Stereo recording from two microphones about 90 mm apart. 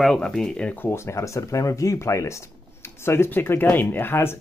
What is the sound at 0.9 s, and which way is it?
Speech, 35° left (ahead or behind).